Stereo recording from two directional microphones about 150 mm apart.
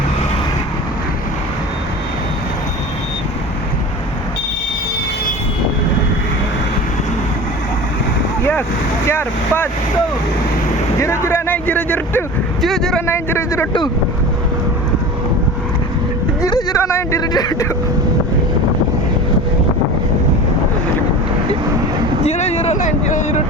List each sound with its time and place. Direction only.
9.0 s speech: 15° left (ahead or behind)
11.0 s a man's voice: 15° left (ahead or behind); by 13.0 s centre (ahead or behind)
13.1 s speech: 15° left (ahead or behind)
16.4 s speech: 25° left (ahead or behind)
22.2 s speech: 45° left (ahead or behind)